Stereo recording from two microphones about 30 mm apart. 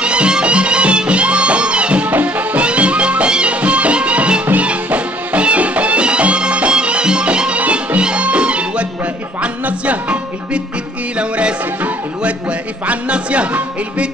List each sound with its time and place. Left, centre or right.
0.0 s music: right
7.6 s music: right